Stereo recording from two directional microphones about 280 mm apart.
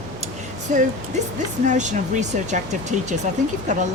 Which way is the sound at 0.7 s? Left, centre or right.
Right.